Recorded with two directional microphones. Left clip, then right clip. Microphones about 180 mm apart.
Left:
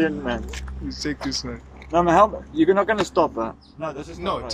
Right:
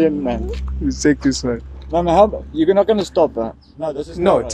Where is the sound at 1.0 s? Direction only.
70° right (ahead or behind).